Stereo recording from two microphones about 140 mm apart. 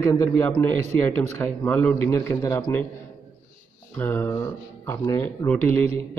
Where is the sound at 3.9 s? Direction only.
15° left (ahead or behind).